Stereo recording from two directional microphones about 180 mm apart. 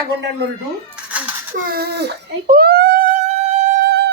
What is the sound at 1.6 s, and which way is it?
Speech, 55° right (ahead or behind).